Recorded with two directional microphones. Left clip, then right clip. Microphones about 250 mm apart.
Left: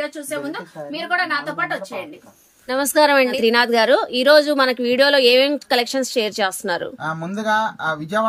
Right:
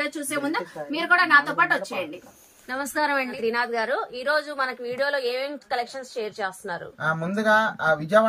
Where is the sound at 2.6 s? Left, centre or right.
Left.